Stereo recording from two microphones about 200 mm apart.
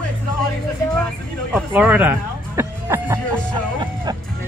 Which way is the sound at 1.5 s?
10° right (ahead or behind).